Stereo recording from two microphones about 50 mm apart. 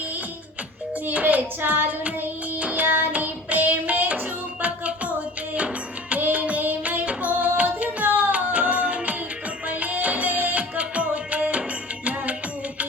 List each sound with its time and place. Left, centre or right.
1.0 s child singing: right
2.8 s child singing: right
3.1 s music: right